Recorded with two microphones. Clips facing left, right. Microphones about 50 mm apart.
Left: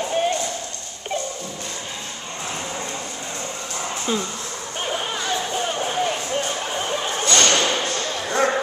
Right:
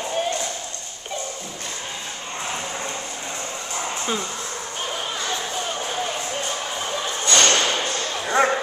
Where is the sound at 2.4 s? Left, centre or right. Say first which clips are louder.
Even; centre.